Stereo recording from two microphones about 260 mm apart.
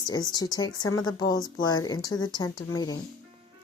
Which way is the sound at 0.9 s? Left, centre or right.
Left.